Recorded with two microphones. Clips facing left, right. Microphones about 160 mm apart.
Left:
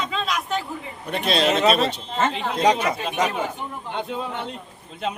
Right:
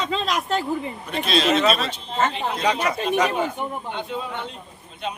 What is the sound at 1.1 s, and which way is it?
Speech, 60° left (ahead or behind).